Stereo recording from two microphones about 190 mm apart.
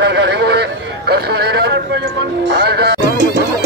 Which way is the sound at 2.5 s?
60° right (ahead or behind).